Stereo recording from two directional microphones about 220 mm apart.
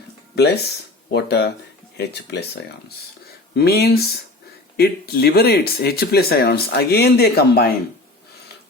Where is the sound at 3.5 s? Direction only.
45° left (ahead or behind).